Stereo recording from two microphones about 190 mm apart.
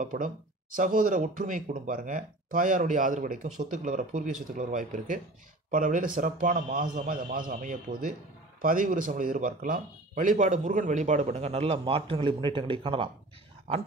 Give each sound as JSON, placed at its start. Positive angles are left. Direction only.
{"t": 0.0, "sound": "speech", "side_deg": -45}